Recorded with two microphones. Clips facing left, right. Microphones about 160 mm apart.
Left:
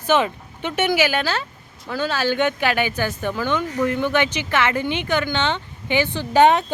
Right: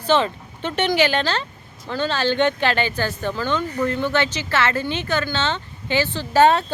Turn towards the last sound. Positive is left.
turn(degrees=15)  # may be behind; listen again after turning